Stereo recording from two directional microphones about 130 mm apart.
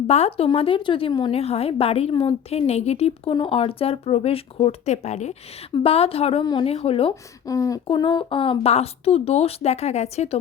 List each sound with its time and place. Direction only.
0.1 s speech: 50° left (ahead or behind)
1.3 s speech: 50° left (ahead or behind)
3.3 s speech: 45° left (ahead or behind)
6.4 s speech: 30° left (ahead or behind)
6.7 s speech: 45° left (ahead or behind)
7.4 s speech: 25° left (ahead or behind)
7.9 s speech: 40° left (ahead or behind); by 10.2 s 55° left (ahead or behind)